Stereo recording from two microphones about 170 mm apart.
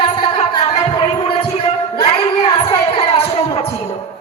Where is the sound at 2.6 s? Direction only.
35° left (ahead or behind).